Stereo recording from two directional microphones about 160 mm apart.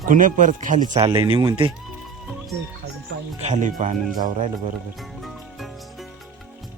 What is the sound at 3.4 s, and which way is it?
Speech, 45° right (ahead or behind).